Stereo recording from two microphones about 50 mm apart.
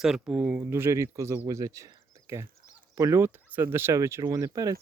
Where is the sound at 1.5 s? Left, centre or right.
Right.